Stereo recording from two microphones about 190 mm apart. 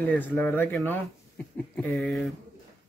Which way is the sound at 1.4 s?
10° left (ahead or behind).